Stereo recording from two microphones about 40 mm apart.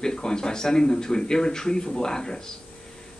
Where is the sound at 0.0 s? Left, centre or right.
Centre.